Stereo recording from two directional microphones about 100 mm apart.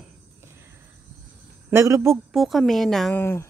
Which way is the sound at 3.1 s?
25° left (ahead or behind).